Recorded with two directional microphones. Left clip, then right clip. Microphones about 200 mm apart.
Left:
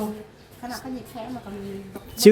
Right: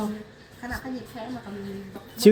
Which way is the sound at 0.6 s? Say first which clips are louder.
Even; 15° left (ahead or behind).